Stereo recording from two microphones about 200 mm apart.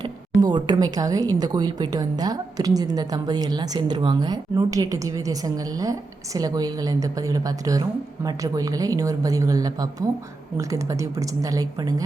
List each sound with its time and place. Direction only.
0.4 s a woman's voice: 20° right (ahead or behind)